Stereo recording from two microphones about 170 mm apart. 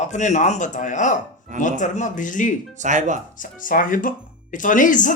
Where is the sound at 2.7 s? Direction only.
45° right (ahead or behind).